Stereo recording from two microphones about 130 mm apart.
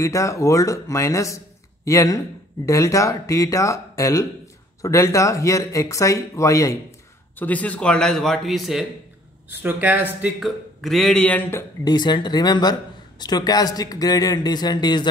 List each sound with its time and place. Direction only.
0.0 s speech: 25° left (ahead or behind)
7.3 s a man's voice: 10° left (ahead or behind)
9.5 s speech: 15° right (ahead or behind)
10.4 s a man's voice: centre (ahead or behind)
11.8 s speech: 35° left (ahead or behind)